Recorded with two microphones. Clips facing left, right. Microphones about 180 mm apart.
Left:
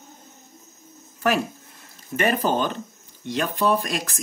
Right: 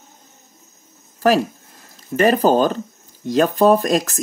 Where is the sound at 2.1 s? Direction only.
40° right (ahead or behind).